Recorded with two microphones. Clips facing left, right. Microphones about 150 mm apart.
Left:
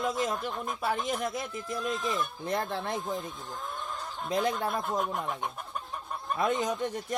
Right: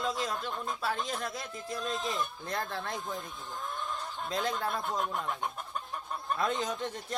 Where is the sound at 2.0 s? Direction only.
20° right (ahead or behind).